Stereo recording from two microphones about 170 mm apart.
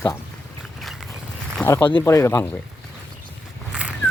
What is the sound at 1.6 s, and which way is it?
Speech, 15° left (ahead or behind).